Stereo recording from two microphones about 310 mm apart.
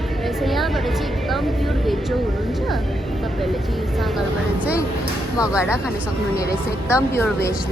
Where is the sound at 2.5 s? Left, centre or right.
Centre.